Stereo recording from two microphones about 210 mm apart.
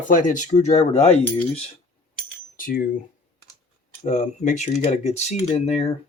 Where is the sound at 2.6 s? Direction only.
40° left (ahead or behind).